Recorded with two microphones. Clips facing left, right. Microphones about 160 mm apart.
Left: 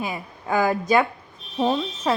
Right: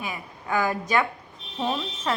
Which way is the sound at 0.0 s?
35° left (ahead or behind).